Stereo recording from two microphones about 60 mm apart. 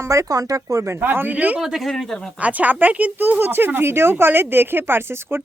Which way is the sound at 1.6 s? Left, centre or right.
Centre.